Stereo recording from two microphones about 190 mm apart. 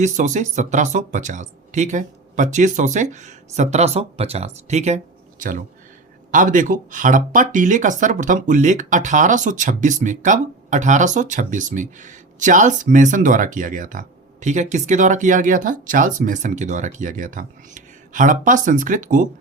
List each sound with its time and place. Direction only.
0.0 s speech: 40° right (ahead or behind)